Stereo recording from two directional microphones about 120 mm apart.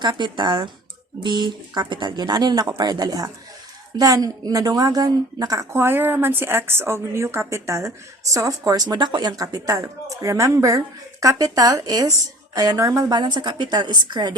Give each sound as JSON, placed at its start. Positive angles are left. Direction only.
{"t": 0.0, "sound": "a woman's voice", "side_deg": -40}